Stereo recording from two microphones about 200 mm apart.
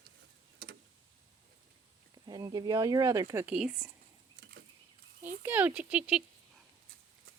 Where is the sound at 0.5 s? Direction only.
50° right (ahead or behind).